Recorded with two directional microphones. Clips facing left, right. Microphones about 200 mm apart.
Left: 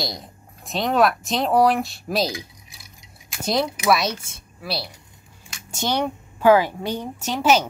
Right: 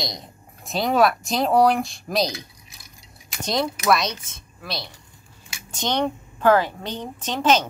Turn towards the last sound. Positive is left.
turn(degrees=10)  # may be behind; listen again after turning